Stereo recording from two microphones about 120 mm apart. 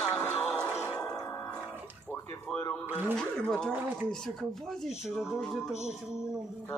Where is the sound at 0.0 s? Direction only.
20° left (ahead or behind).